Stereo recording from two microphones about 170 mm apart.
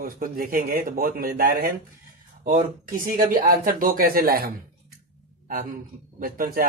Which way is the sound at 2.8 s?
55° right (ahead or behind).